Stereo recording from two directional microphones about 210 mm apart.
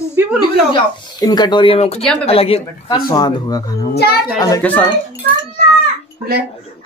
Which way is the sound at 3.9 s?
50° left (ahead or behind).